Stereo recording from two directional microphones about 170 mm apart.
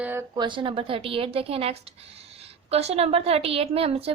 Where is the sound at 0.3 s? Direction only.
30° right (ahead or behind).